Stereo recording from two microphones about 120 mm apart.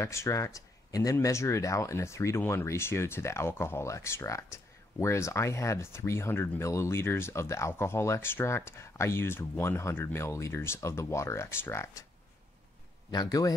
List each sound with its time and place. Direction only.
0.0 s speech: 25° left (ahead or behind)
13.1 s a man's voice: 35° left (ahead or behind)